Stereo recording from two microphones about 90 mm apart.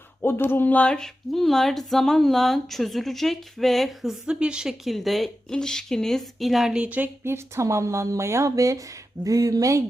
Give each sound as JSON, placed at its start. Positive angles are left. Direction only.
{"t": 0.2, "sound": "speech", "side_deg": 25}